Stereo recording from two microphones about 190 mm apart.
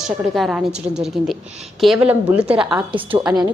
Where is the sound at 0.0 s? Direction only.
Centre (ahead or behind).